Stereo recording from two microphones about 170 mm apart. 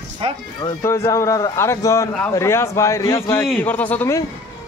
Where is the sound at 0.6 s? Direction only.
20° left (ahead or behind).